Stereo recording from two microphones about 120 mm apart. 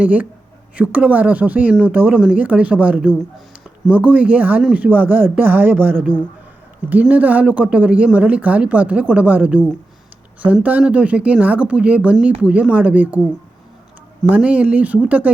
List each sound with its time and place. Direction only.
0.0 s speech: 15° right (ahead or behind)
14.3 s speech: 10° right (ahead or behind)